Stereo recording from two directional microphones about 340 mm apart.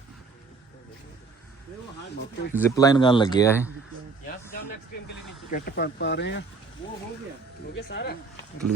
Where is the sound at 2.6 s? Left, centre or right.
Centre.